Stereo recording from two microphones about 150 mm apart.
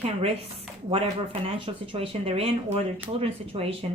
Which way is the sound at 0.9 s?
40° right (ahead or behind).